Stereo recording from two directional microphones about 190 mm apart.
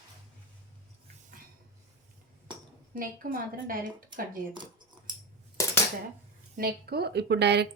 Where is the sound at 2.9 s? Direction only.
50° right (ahead or behind).